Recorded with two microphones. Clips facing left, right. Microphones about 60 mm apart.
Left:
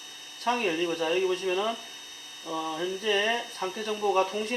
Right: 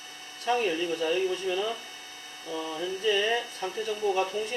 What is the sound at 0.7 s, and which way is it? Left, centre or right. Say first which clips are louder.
Speech: left 1 dB; left.